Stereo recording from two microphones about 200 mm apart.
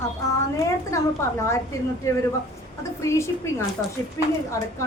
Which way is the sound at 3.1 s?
15° left (ahead or behind).